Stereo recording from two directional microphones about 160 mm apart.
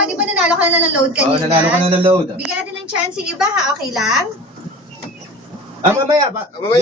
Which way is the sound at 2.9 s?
5° right (ahead or behind).